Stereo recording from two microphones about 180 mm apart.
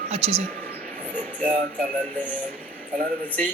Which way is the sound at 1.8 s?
45° right (ahead or behind).